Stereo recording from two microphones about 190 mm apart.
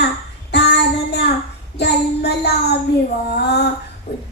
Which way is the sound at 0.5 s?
60° left (ahead or behind).